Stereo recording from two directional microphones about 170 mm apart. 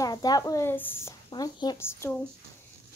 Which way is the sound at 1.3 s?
25° left (ahead or behind).